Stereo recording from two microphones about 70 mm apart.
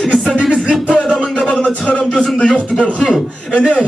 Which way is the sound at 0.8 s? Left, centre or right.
Centre.